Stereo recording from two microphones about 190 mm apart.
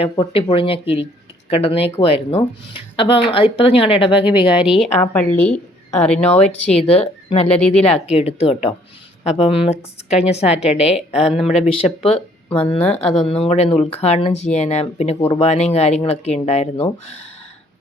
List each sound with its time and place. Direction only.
0.0 s a woman's voice: 25° left (ahead or behind)
4.5 s speech: 5° right (ahead or behind)
4.9 s a woman's voice: 10° left (ahead or behind)
6.7 s speech: 30° left (ahead or behind)
7.4 s a woman's voice: 5° left (ahead or behind)
7.9 s speech: 35° left (ahead or behind)
11.2 s speech: centre (ahead or behind)
12.0 s speech: 30° left (ahead or behind)